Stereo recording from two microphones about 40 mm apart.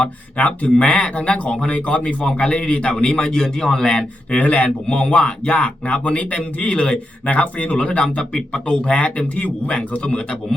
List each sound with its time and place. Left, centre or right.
0.3 s a man's voice: left
4.4 s a man's voice: left